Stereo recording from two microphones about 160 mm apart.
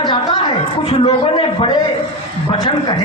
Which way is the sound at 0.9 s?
40° left (ahead or behind).